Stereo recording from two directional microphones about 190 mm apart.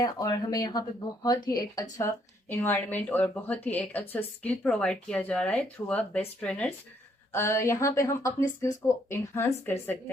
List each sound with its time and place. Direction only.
0.0 s a woman's voice: 20° left (ahead or behind)